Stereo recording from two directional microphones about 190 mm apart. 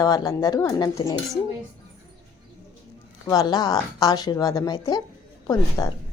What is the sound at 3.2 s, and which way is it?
Speech, 20° left (ahead or behind).